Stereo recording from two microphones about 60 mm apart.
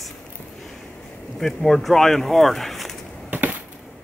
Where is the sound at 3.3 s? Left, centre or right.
Right.